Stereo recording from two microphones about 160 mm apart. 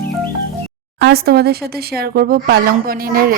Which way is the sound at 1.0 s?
80° right.